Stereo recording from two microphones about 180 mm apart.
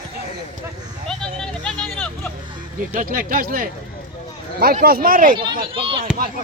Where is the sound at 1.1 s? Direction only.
5° left (ahead or behind).